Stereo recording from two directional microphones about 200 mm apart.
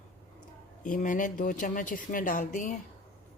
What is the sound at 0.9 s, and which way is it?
Speech, 40° left (ahead or behind).